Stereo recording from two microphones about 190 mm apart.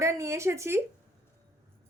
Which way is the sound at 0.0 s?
15° right (ahead or behind).